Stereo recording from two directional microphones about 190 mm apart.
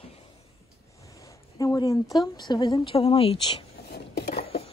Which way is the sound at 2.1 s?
20° left (ahead or behind).